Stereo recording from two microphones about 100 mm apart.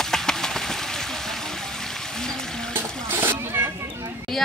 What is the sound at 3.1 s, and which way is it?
Splash, 20° right (ahead or behind).